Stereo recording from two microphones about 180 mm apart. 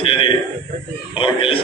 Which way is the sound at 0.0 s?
30° left (ahead or behind).